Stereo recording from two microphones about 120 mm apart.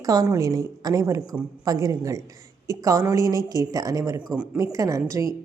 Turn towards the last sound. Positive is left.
turn(degrees=-25)  # may be behind; listen again after turning